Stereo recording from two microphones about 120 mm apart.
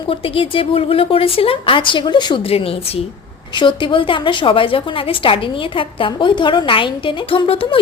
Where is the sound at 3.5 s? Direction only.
45° left (ahead or behind).